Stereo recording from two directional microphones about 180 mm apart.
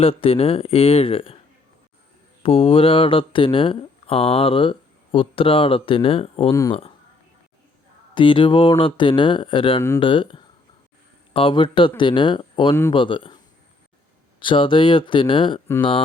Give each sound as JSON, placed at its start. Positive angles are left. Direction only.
{"t": 0.0, "sound": "speech", "side_deg": 30}
{"t": 2.4, "sound": "speech", "side_deg": 30}
{"t": 6.5, "sound": "speech", "side_deg": 15}
{"t": 8.1, "sound": "speech", "side_deg": 25}